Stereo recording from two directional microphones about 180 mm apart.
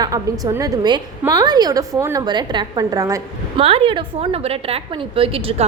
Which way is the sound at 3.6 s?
30° right (ahead or behind).